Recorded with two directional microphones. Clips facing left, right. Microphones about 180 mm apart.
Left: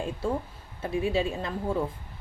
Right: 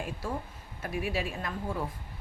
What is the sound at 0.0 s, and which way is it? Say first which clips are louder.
A woman's voice: left 6 dB; 25° left (ahead or behind).